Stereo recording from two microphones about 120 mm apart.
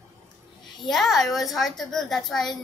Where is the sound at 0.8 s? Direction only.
Centre (ahead or behind).